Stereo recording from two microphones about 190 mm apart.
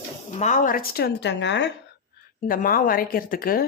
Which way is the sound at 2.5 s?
50° left (ahead or behind).